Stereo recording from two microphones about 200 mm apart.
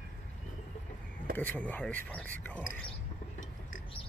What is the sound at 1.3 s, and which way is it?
Speech, 10° left (ahead or behind).